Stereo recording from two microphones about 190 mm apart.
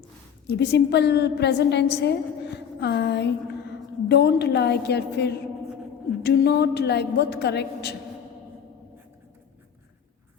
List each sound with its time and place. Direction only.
0.4 s a woman's voice: 65° left (ahead or behind)